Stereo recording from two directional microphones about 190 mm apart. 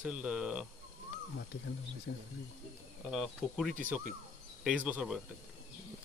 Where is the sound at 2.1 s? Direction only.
75° left (ahead or behind).